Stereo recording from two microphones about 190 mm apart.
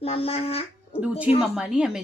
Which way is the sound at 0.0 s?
30° left (ahead or behind).